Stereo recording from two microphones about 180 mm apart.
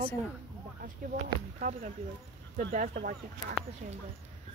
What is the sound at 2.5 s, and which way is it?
Speech, 50° right (ahead or behind).